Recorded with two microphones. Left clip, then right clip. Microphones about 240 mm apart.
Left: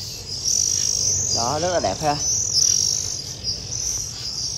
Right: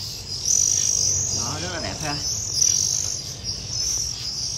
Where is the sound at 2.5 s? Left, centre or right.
Centre.